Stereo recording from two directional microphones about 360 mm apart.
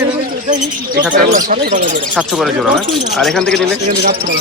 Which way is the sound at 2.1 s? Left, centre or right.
Centre.